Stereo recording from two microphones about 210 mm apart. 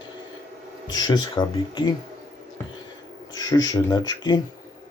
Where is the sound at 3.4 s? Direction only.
20° left (ahead or behind).